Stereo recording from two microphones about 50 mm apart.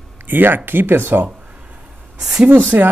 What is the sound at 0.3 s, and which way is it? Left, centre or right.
Speech, right.